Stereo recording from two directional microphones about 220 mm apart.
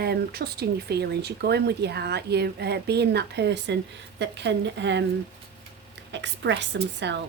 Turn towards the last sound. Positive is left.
turn(degrees=-50)  # may be behind; listen again after turning